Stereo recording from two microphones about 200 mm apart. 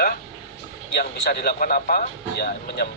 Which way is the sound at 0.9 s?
55° left (ahead or behind).